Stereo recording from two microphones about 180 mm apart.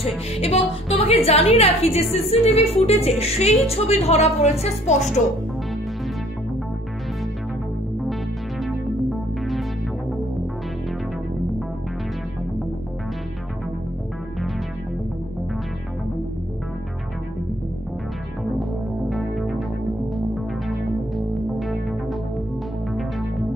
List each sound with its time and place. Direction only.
0.4 s a woman's voice: 35° left (ahead or behind)
8.6 s music: centre (ahead or behind)
18.6 s music: centre (ahead or behind)
21.2 s music: centre (ahead or behind)